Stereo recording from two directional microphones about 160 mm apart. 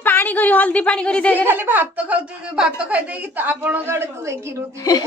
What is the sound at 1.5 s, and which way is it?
A woman's voice, 10° right (ahead or behind).